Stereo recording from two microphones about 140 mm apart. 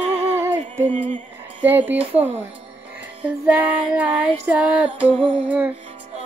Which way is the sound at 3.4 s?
10° right (ahead or behind).